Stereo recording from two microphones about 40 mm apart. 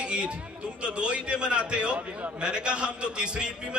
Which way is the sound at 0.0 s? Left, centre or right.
Right.